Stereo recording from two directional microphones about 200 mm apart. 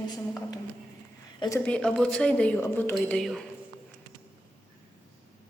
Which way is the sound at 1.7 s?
5° left (ahead or behind).